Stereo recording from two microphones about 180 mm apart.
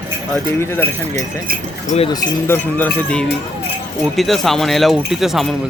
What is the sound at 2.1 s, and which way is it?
Speech, 20° left (ahead or behind).